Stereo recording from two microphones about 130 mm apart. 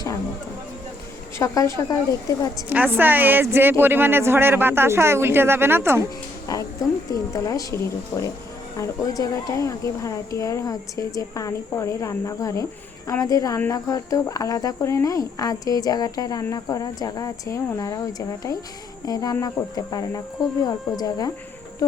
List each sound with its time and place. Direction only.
1.4 s speech: 25° left (ahead or behind)
2.6 s speech: 10° right (ahead or behind)
6.5 s speech: 25° left (ahead or behind)
8.1 s speech: 10° left (ahead or behind)
8.7 s speech: 25° left (ahead or behind)
21.8 s insect: 25° left (ahead or behind)